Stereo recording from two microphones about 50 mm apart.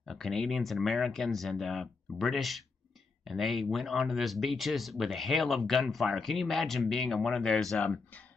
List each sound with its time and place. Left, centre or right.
0.0 s speech: centre
7.8 s speech: left